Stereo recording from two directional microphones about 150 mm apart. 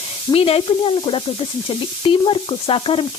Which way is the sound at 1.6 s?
35° left (ahead or behind).